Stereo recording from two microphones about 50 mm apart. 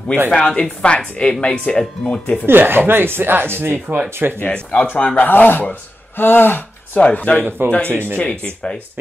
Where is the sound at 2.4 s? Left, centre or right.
Right.